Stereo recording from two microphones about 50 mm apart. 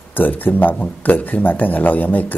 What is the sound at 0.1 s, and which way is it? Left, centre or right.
Speech, left.